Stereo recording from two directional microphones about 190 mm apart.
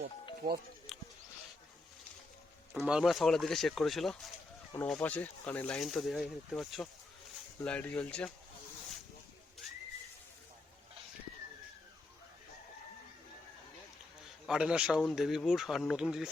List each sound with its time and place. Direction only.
0.4 s speech: 40° right (ahead or behind)
0.9 s a sound: centre (ahead or behind)
2.7 s speech: centre (ahead or behind)
14.4 s speech: 5° right (ahead or behind)